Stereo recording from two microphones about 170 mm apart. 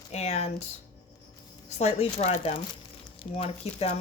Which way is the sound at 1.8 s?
40° left (ahead or behind).